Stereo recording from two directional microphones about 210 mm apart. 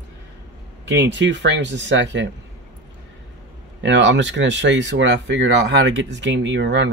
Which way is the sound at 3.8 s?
60° right (ahead or behind).